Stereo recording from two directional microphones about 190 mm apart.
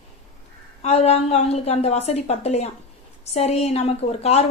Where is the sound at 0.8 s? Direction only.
35° left (ahead or behind).